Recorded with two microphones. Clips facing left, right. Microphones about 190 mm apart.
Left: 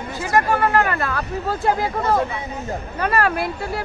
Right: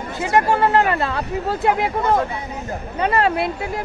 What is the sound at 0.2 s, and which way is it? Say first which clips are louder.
Speech: right 2 dB; 25° right (ahead or behind).